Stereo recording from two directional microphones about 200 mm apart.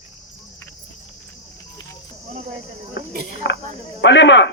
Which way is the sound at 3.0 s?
65° left (ahead or behind).